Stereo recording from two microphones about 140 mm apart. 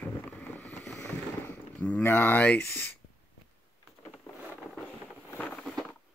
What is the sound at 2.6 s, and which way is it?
Speech, 15° left (ahead or behind).